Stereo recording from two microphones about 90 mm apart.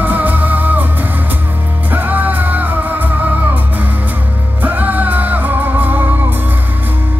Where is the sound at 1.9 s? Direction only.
20° right (ahead or behind).